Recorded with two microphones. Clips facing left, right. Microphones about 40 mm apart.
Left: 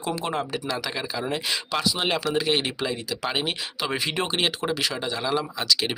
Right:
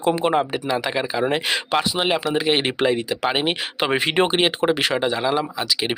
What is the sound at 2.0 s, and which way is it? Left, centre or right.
Speech, centre.